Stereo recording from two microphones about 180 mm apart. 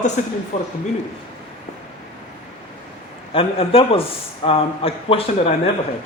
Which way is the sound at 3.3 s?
30° left (ahead or behind).